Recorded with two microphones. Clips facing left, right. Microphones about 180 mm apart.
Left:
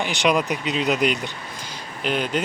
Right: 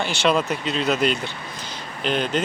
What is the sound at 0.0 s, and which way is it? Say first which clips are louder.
Speech: even; 15° left (ahead or behind).